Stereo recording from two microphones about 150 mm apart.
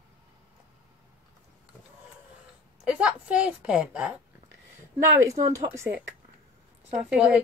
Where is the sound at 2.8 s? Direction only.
10° right (ahead or behind).